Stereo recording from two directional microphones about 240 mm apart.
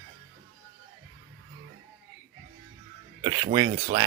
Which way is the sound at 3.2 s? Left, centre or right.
Centre.